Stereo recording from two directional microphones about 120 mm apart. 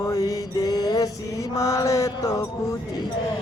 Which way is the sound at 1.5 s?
25° left (ahead or behind).